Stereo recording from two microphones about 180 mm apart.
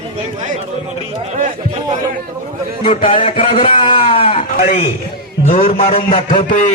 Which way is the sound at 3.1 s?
30° left (ahead or behind).